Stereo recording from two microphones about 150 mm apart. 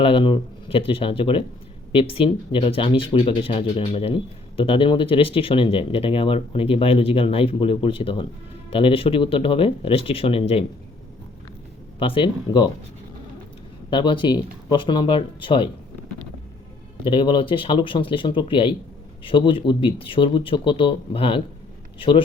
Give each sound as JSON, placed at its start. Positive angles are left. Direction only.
{"t": 0.0, "sound": "speech", "side_deg": 35}
{"t": 11.9, "sound": "speech", "side_deg": 35}
{"t": 13.9, "sound": "speech", "side_deg": 35}
{"t": 17.0, "sound": "speech", "side_deg": 35}